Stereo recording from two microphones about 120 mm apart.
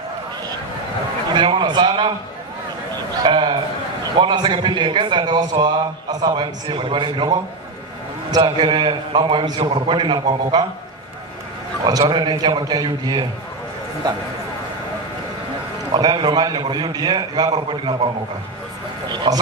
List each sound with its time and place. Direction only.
1.3 s a man's voice: 40° right (ahead or behind)
3.2 s a sound: 40° right (ahead or behind)
4.2 s a man's voice: 45° right (ahead or behind)
11.9 s a man's voice: 35° right (ahead or behind)
15.9 s a man's voice: 40° right (ahead or behind)
19.0 s a sound: 35° right (ahead or behind)